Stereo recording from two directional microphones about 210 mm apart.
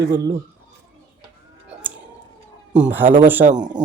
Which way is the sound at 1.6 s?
5° right (ahead or behind).